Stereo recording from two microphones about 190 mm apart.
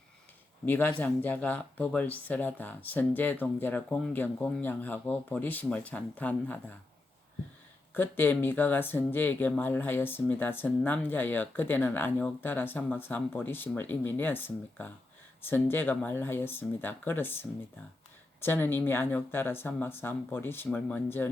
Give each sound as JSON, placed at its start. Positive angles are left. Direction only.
{"t": 0.6, "sound": "speech", "side_deg": 10}
{"t": 7.9, "sound": "speech", "side_deg": 10}